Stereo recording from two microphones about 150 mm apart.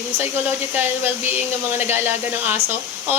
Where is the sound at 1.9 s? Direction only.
15° right (ahead or behind).